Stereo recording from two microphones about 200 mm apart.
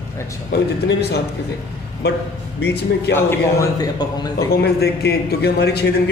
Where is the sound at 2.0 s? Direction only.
55° left (ahead or behind).